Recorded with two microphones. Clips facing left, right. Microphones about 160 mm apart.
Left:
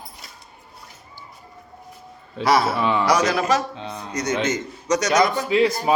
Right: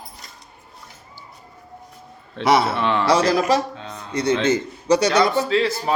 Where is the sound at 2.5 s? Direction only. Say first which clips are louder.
Right 1 dB; 25° right (ahead or behind).